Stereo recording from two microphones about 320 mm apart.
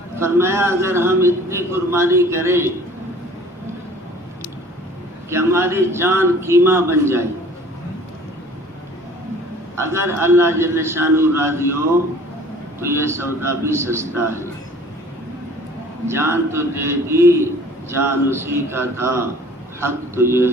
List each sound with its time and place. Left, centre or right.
0.2 s a man's voice: centre
5.3 s a man's voice: centre
9.7 s a man's voice: centre
12.8 s a man's voice: centre
16.0 s a man's voice: centre